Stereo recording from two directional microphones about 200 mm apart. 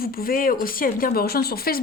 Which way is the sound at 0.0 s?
50° left (ahead or behind).